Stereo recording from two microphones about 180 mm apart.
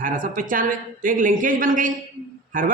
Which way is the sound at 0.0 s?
50° right (ahead or behind).